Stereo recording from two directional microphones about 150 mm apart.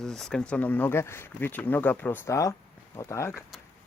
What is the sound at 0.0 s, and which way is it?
Speech, 5° left (ahead or behind).